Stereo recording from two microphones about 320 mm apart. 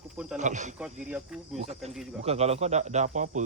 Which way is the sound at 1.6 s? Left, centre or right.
Centre.